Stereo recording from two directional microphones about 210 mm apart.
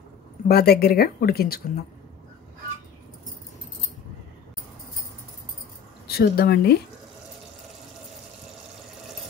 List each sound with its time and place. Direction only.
0.5 s speech: 45° left (ahead or behind)
6.0 s speech: 50° left (ahead or behind)